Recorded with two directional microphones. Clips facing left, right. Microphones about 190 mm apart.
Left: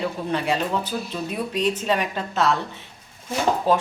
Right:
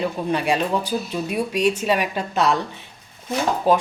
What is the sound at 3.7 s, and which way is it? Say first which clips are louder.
Speech: right 3 dB; 15° right (ahead or behind).